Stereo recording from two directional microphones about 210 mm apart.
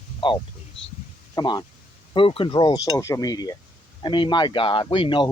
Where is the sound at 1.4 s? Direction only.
20° left (ahead or behind).